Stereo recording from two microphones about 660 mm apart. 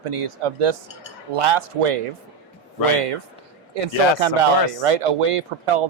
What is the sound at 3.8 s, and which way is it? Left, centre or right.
A man's voice, right.